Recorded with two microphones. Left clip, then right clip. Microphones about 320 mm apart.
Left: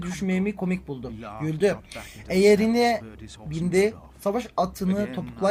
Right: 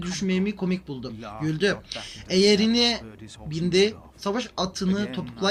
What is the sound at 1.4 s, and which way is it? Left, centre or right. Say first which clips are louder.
Speech: left 1 dB; left.